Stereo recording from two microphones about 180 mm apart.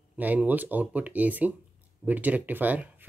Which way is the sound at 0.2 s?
10° right (ahead or behind).